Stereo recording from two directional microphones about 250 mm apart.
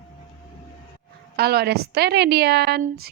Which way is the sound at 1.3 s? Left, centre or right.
Right.